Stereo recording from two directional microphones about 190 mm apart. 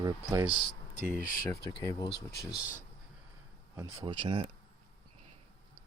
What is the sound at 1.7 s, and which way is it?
Speech, 20° left (ahead or behind).